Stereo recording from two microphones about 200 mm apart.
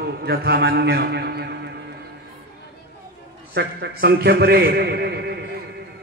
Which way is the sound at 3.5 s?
55° right (ahead or behind).